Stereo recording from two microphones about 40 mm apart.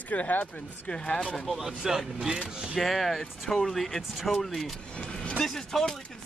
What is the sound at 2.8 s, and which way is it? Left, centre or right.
Speech, centre.